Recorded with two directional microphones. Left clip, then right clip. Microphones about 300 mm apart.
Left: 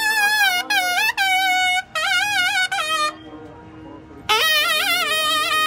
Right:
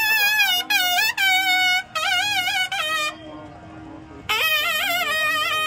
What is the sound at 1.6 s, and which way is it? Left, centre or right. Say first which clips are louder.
Music: left 1 dB; centre.